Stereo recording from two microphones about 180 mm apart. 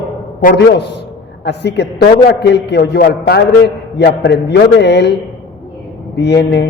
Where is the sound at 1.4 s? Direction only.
70° left (ahead or behind).